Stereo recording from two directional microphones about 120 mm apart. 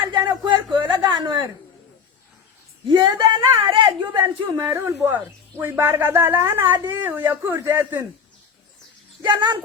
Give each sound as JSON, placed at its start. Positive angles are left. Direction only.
{"t": 0.0, "sound": "a sound", "side_deg": -40}
{"t": 2.9, "sound": "speech", "side_deg": -35}
{"t": 4.6, "sound": "speech", "side_deg": -25}
{"t": 9.2, "sound": "speech", "side_deg": -40}